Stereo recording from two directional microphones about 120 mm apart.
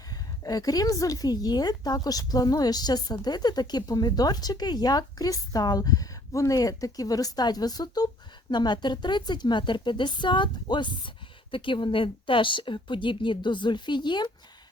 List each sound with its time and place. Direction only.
0.4 s a woman's voice: 30° left (ahead or behind)